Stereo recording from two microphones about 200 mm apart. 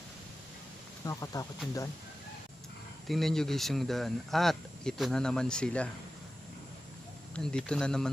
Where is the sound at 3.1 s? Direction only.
Centre (ahead or behind).